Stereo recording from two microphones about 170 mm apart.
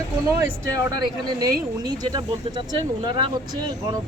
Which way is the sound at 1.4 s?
25° right (ahead or behind).